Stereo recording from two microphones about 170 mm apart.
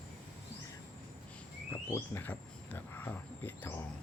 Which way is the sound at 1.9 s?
15° left (ahead or behind).